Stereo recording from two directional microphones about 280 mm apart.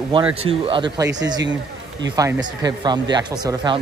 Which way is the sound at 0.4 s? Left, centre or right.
Centre.